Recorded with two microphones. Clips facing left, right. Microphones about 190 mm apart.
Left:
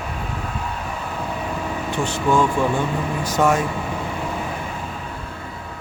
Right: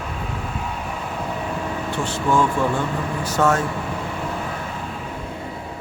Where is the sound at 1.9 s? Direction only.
15° left (ahead or behind).